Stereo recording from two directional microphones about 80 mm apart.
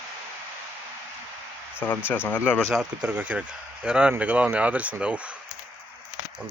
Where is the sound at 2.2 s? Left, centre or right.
Left.